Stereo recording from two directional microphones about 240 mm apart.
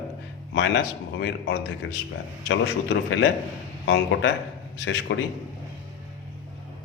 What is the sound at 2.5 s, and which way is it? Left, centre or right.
Speech, left.